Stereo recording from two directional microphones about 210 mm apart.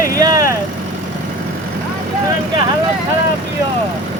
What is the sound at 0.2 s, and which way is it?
Vehicle, 15° right (ahead or behind).